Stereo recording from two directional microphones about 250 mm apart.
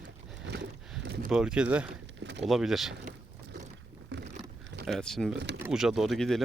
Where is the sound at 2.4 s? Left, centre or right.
Centre.